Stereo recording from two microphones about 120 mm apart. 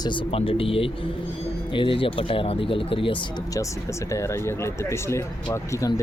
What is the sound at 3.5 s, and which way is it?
Speech, 25° left (ahead or behind).